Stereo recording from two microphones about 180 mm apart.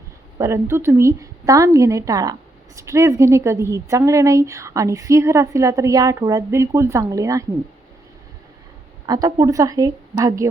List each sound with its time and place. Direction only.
0.3 s a woman's voice: 15° right (ahead or behind)
9.0 s a woman's voice: 20° right (ahead or behind)